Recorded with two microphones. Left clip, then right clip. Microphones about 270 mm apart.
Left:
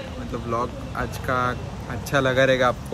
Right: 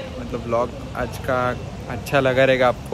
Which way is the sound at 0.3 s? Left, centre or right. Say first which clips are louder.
Right 4 dB; centre.